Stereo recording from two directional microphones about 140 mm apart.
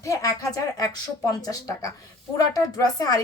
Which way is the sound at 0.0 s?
25° left (ahead or behind).